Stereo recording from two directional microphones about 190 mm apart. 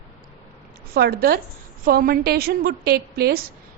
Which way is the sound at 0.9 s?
55° right (ahead or behind).